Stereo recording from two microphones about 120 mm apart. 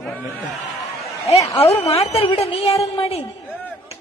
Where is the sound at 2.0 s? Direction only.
55° left (ahead or behind).